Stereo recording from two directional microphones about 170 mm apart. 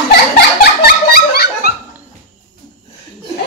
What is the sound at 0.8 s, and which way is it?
Dog, 65° left (ahead or behind).